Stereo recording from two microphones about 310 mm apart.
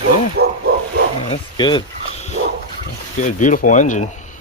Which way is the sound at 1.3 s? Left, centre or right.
Centre.